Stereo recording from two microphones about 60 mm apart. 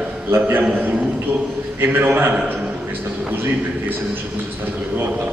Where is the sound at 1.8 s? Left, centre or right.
Right.